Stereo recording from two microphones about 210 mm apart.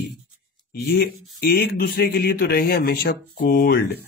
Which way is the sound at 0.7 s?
50° left (ahead or behind).